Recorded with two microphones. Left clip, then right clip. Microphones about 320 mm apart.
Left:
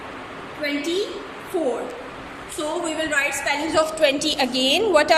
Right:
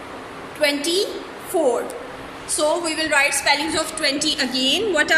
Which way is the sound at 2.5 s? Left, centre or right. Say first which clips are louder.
Right 5 dB; centre.